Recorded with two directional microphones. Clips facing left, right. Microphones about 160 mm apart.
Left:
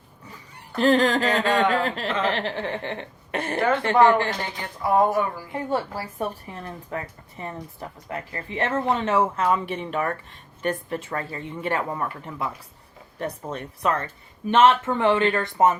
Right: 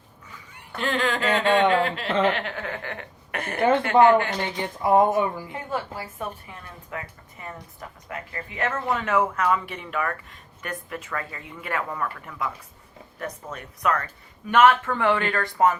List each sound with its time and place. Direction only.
0.3 s speech: 40° left (ahead or behind)
4.5 s speech: 20° right (ahead or behind)
5.5 s a woman's voice: 35° left (ahead or behind)